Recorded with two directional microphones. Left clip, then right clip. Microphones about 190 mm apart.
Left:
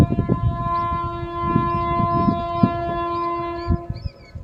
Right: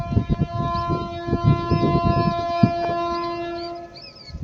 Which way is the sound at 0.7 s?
10° left (ahead or behind).